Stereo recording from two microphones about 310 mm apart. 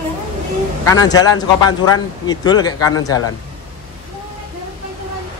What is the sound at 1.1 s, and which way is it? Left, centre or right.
Speech, centre.